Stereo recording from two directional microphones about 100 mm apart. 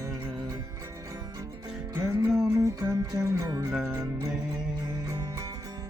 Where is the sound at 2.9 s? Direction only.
40° right (ahead or behind).